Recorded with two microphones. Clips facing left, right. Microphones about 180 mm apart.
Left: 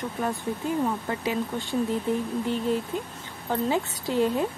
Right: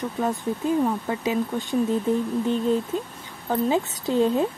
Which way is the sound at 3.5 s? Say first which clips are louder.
Right 3 dB; 20° right (ahead or behind).